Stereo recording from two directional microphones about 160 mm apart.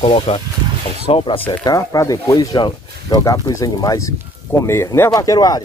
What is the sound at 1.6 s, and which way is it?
Speech, 25° left (ahead or behind).